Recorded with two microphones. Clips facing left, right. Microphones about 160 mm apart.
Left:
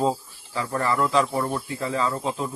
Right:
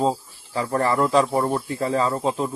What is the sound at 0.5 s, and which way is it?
Speech, 35° right (ahead or behind).